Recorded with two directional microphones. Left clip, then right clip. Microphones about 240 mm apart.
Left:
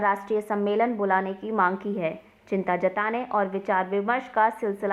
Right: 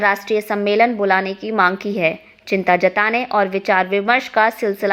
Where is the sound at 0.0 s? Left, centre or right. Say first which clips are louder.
Right 7 dB; right.